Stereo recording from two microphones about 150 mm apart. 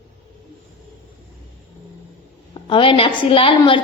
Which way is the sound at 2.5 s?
35° left (ahead or behind).